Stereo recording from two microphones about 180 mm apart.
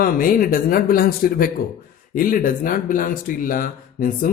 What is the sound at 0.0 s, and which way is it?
Speech, 50° left (ahead or behind).